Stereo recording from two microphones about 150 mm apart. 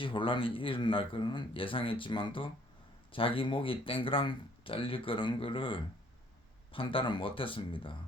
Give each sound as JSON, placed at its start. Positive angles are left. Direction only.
{"t": 0.0, "sound": "speech", "side_deg": 35}